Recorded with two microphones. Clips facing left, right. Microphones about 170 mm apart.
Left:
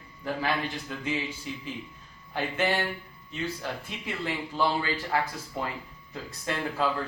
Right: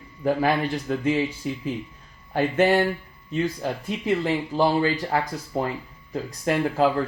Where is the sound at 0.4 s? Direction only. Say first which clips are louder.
Right 7 dB; 50° right (ahead or behind).